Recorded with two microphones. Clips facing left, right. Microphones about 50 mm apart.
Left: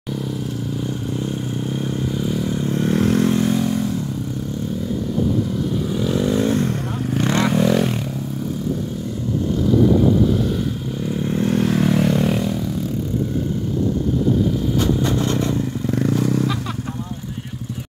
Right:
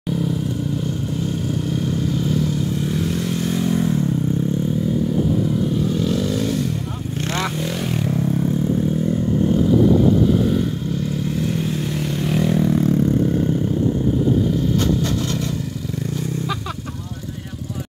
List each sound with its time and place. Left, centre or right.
2.1 s a sound: centre
2.7 s vehicle: left
3.3 s vehicle: centre
5.9 s vehicle: centre
6.1 s a sound: left
10.3 s vehicle: centre
11.2 s vehicle: left
12.4 s a sound: right
15.0 s vehicle: centre